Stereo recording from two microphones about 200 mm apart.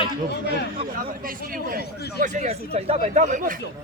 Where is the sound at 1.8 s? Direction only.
55° left (ahead or behind).